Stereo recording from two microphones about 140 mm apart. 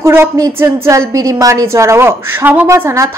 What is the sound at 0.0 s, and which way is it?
A woman's voice, 20° right (ahead or behind).